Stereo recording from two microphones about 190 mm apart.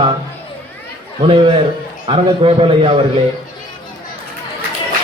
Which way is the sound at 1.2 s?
25° right (ahead or behind).